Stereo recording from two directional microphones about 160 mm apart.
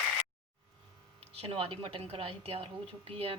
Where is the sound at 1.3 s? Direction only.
40° right (ahead or behind).